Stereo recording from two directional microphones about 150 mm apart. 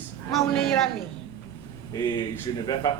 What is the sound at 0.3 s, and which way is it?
Speech, centre (ahead or behind).